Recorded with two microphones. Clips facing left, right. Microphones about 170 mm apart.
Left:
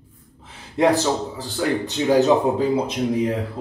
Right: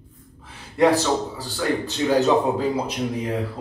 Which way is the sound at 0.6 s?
20° left (ahead or behind).